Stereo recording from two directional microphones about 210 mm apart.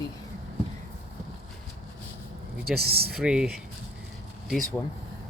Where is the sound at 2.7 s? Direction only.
50° right (ahead or behind).